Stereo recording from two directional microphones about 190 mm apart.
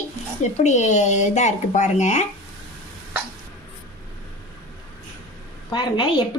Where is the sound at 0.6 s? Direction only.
40° left (ahead or behind).